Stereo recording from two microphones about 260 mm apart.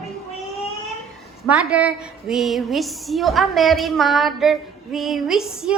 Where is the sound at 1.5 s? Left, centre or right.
Centre.